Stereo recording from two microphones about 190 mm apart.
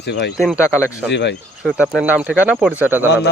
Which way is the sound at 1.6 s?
Centre (ahead or behind).